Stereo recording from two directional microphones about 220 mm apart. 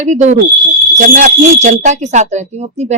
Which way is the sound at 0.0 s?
30° right (ahead or behind).